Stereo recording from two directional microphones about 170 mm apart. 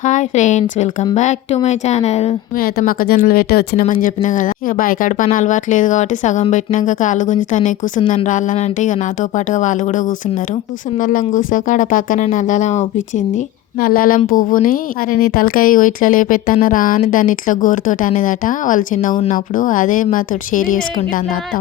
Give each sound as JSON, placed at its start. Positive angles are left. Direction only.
{"t": 0.0, "sound": "speech", "side_deg": 45}
{"t": 2.6, "sound": "speech", "side_deg": 60}
{"t": 3.8, "sound": "speech", "side_deg": 50}
{"t": 11.0, "sound": "speech", "side_deg": 50}
{"t": 13.8, "sound": "speech", "side_deg": 60}